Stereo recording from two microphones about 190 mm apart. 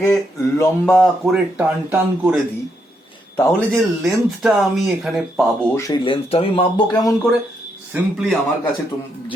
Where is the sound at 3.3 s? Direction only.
5° left (ahead or behind).